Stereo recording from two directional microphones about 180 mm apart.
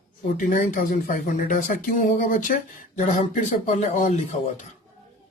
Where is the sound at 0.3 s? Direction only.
45° left (ahead or behind).